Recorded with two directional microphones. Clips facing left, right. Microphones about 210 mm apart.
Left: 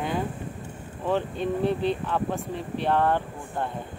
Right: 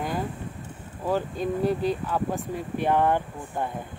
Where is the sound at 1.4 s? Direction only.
40° right (ahead or behind).